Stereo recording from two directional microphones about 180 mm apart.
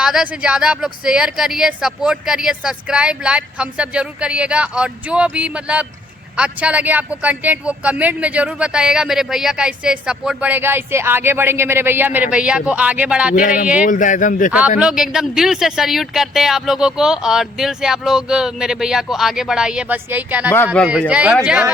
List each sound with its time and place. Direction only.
0.0 s speech: 5° right (ahead or behind)
13.8 s speech: 45° left (ahead or behind)
14.8 s speech: 5° right (ahead or behind)
20.8 s speech: 5° left (ahead or behind)
21.1 s speech: 5° right (ahead or behind)